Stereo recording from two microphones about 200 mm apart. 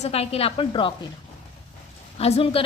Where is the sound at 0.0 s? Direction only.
30° left (ahead or behind).